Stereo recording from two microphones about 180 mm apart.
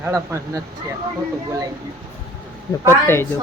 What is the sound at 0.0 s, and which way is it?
Speech, 15° right (ahead or behind).